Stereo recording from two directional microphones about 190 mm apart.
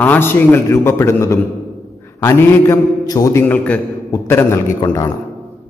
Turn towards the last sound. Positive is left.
turn(degrees=15)  # may be behind; listen again after turning